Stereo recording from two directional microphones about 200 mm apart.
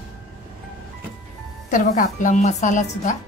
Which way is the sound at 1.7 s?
40° left (ahead or behind).